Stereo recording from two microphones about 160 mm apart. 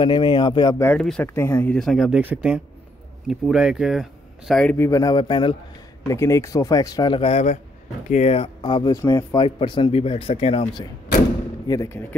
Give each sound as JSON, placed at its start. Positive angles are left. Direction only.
{"t": 0.0, "sound": "speech", "side_deg": 30}
{"t": 0.9, "sound": "speech", "side_deg": 5}
{"t": 1.8, "sound": "speech", "side_deg": 0}
{"t": 4.7, "sound": "speech", "side_deg": 20}
{"t": 6.0, "sound": "speech", "side_deg": 20}
{"t": 9.6, "sound": "speech", "side_deg": 30}
{"t": 11.6, "sound": "speech", "side_deg": 20}